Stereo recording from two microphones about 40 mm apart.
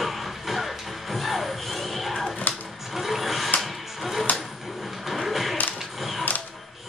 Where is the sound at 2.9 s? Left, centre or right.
Centre.